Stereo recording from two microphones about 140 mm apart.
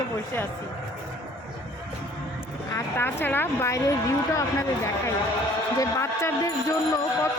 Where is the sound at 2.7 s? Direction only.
15° left (ahead or behind).